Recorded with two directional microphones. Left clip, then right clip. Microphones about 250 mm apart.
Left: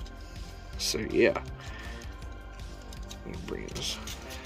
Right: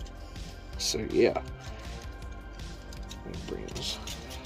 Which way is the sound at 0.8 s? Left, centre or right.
Centre.